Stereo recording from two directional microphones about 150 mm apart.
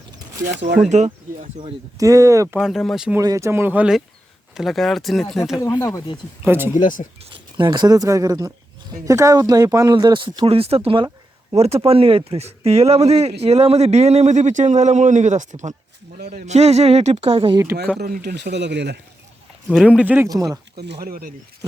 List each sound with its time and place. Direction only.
0.6 s a man's voice: 50° right (ahead or behind)
2.0 s speech: 20° right (ahead or behind)
2.6 s speech: centre (ahead or behind)
3.2 s speech: 20° right (ahead or behind); by 5.2 s centre (ahead or behind)
5.5 s speech: 25° left (ahead or behind)
6.4 s speech: 15° right (ahead or behind)
6.7 s speech: 60° left (ahead or behind)
7.2 s a man's voice: 35° right (ahead or behind); by 15.7 s 55° right (ahead or behind)
16.1 s speech: 80° right
16.5 s a man's voice: 45° right (ahead or behind)
18.0 s speech: 90° right
19.6 s speech: 5° right (ahead or behind)
20.2 s speech: 25° right (ahead or behind)
20.7 s speech: 85° right